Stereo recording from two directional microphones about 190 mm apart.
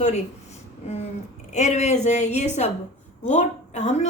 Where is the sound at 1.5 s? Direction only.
35° left (ahead or behind).